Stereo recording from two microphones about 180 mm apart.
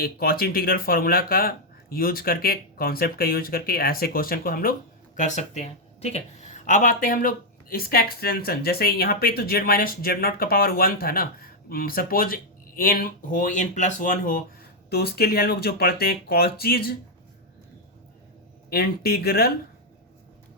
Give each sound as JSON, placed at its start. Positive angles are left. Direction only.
{"t": 0.0, "sound": "speech", "side_deg": 60}
{"t": 14.8, "sound": "speech", "side_deg": 60}
{"t": 18.7, "sound": "speech", "side_deg": 60}